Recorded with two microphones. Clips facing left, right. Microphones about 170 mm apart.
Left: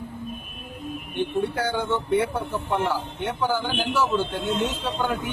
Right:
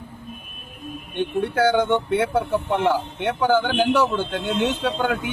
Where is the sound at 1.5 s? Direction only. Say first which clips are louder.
Right 7 dB; 85° right.